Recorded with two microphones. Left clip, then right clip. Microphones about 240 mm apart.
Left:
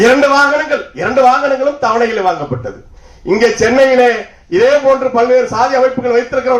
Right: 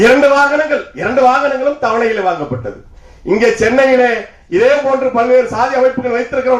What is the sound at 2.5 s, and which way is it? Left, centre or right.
A man's voice, left.